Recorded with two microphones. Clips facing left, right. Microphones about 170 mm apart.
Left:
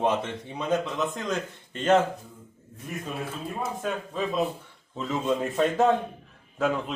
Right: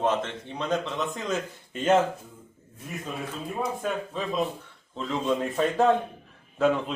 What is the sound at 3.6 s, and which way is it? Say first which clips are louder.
Speech: right 1 dB; 5° left (ahead or behind).